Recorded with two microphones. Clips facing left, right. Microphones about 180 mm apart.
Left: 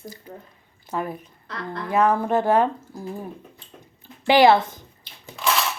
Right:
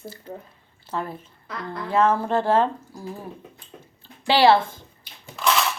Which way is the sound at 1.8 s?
15° left (ahead or behind).